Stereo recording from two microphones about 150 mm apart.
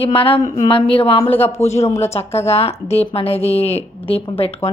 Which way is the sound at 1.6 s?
45° left (ahead or behind).